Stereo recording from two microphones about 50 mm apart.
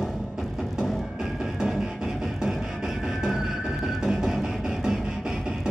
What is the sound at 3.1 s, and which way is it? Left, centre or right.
Music, centre.